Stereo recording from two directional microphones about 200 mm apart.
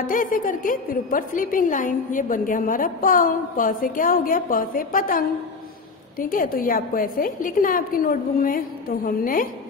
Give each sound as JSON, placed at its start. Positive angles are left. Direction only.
{"t": 0.0, "sound": "a woman's voice", "side_deg": 45}